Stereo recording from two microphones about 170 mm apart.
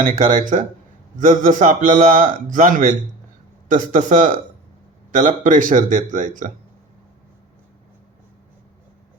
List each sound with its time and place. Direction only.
0.0 s speech: 50° right (ahead or behind)